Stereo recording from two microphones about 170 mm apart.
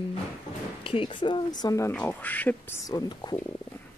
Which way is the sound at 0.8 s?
30° left (ahead or behind).